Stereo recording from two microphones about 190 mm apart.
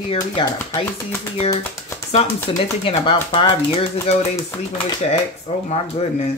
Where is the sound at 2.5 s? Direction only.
25° left (ahead or behind).